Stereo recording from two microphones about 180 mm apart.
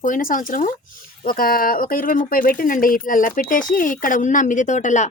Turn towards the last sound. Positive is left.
turn(degrees=40)  # may be behind; listen again after turning